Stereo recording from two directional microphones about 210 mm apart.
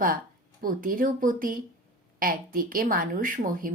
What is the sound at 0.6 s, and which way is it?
A woman's voice, 40° right (ahead or behind).